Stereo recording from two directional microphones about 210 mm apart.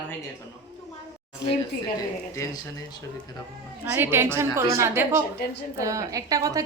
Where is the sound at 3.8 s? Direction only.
10° right (ahead or behind).